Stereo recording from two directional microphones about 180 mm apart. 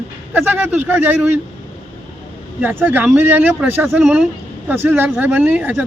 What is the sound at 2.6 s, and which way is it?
Speech, 10° right (ahead or behind).